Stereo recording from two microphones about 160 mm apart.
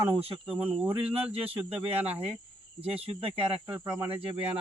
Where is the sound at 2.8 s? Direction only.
35° right (ahead or behind).